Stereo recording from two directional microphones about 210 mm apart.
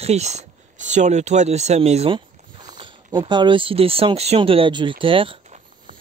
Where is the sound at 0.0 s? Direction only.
30° right (ahead or behind).